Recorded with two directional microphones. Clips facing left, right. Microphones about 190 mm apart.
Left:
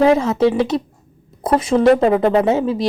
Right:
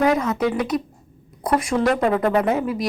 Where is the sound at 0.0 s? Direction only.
25° left (ahead or behind).